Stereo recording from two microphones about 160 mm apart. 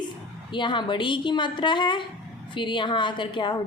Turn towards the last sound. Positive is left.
turn(degrees=30)  # may be behind; listen again after turning